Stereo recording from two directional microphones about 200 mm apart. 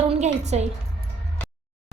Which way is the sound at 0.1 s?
35° right (ahead or behind).